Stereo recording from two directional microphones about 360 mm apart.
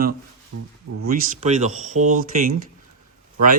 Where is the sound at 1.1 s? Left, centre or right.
Centre.